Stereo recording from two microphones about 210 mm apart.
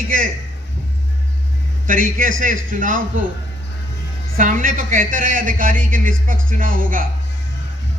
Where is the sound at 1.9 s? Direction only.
40° right (ahead or behind).